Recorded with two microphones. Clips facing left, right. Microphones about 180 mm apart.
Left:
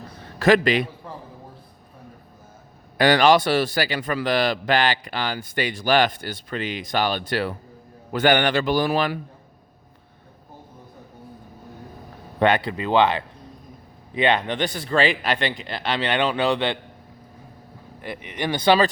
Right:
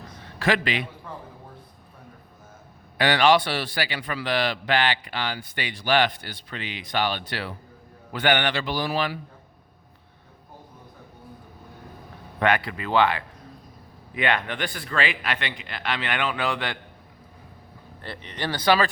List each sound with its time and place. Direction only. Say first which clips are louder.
0.3 s a man's voice: left 7 dB; 45° left (ahead or behind)
3.0 s a man's voice: left 3 dB; 40° left (ahead or behind)
12.4 s a man's voice: left 4 dB; 25° left (ahead or behind)
18.0 s speech: left 4 dB; 10° left (ahead or behind)